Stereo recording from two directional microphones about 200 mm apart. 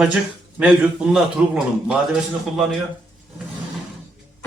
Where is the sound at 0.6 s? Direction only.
5° right (ahead or behind).